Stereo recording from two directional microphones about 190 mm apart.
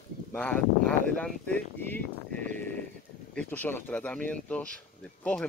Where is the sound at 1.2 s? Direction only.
5° left (ahead or behind).